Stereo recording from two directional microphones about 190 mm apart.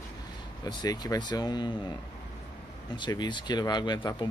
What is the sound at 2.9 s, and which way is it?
Speech, 25° left (ahead or behind).